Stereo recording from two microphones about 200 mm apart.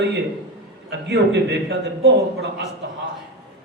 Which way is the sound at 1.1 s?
55° right (ahead or behind).